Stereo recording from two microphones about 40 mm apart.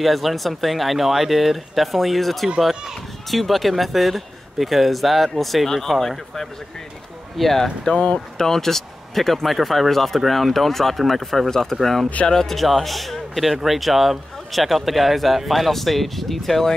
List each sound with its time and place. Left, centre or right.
0.0 s speech: centre
2.7 s speech: centre
3.3 s speech: centre
7.9 s speech: left
8.4 s speech: centre